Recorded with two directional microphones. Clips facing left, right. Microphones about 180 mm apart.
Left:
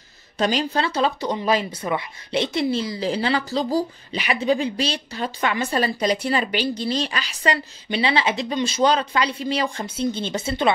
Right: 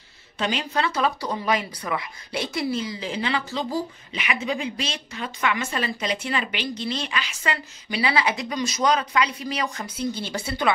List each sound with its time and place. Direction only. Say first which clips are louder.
0.4 s speech: left 4 dB; 35° left (ahead or behind)